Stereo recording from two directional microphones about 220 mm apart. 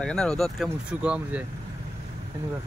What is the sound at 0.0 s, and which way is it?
Speech, 5° left (ahead or behind).